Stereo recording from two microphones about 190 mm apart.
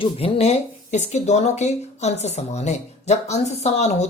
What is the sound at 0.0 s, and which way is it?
Speech, 30° left (ahead or behind).